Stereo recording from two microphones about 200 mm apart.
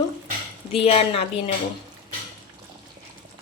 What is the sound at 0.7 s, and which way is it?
Speech, 30° left (ahead or behind).